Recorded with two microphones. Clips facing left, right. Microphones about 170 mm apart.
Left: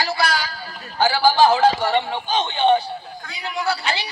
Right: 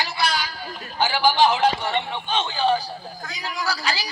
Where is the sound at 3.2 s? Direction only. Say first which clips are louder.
Even; 35° right (ahead or behind).